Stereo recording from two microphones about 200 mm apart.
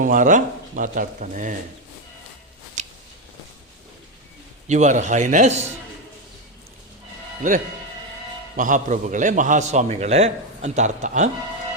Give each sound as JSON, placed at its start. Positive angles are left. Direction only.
{"t": 0.0, "sound": "a man's voice", "side_deg": -40}
{"t": 2.8, "sound": "a sound", "side_deg": -35}
{"t": 4.7, "sound": "a man's voice", "side_deg": -35}
{"t": 7.4, "sound": "a man's voice", "side_deg": -40}